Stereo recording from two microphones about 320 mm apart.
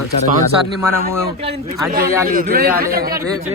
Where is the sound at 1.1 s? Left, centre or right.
Centre.